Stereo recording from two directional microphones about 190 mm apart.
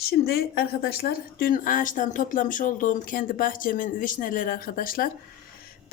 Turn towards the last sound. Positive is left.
turn(degrees=50)  # may be behind; listen again after turning